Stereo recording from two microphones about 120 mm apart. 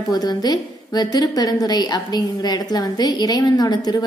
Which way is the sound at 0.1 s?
35° left (ahead or behind).